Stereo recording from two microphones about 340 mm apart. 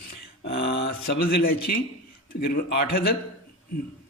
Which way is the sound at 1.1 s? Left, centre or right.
Left.